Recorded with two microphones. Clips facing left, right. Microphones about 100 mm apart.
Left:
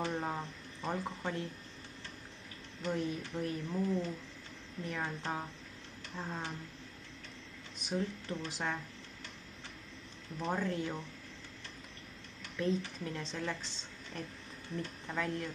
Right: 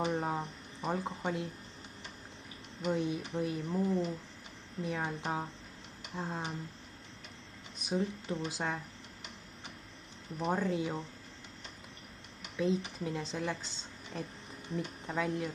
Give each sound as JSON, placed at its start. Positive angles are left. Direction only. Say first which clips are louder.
{"t": 0.0, "sound": "speech", "louder": "right 3 dB", "side_deg": -15}
{"t": 2.8, "sound": "speech", "louder": "right 3 dB", "side_deg": -15}
{"t": 7.9, "sound": "speech", "louder": "right 3 dB", "side_deg": -15}
{"t": 10.4, "sound": "speech", "louder": "right 3 dB", "side_deg": -10}
{"t": 12.4, "sound": "speech", "louder": "right 2 dB", "side_deg": -15}